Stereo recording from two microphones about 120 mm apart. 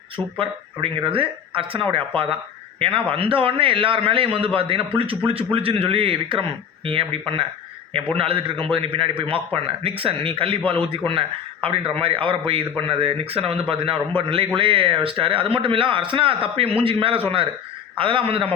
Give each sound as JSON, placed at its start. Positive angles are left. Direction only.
{"t": 0.3, "sound": "speech", "side_deg": -45}